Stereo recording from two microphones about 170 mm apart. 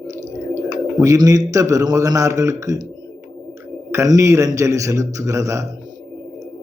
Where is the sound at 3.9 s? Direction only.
20° right (ahead or behind).